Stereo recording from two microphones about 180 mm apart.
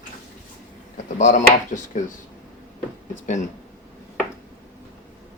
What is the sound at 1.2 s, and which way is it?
Speech, 45° left (ahead or behind).